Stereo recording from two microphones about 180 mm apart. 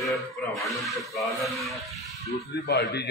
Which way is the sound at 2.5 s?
70° left (ahead or behind).